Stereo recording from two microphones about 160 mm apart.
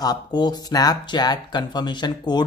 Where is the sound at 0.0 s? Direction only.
25° left (ahead or behind).